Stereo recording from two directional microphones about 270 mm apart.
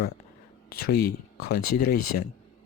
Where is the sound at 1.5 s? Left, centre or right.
Left.